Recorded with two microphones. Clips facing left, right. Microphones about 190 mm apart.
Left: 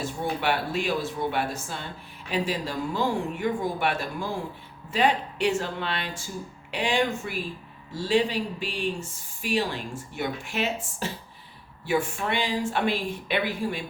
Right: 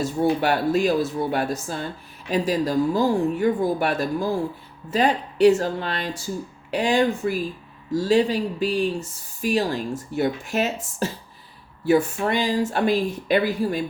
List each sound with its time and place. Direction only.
0.0 s speech: 40° right (ahead or behind)
11.9 s speech: 40° right (ahead or behind)